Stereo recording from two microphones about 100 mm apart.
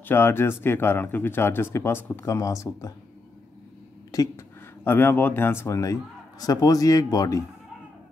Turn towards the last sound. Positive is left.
turn(degrees=35)  # may be behind; listen again after turning